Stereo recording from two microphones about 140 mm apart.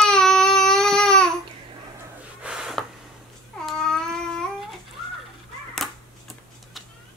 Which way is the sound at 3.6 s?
5° left (ahead or behind).